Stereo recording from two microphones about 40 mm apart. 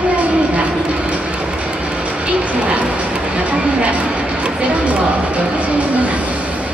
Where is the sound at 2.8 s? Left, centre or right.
Right.